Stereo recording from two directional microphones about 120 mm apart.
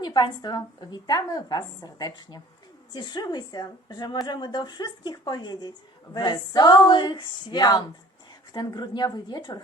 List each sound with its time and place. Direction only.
0.0 s a woman's voice: 35° left (ahead or behind)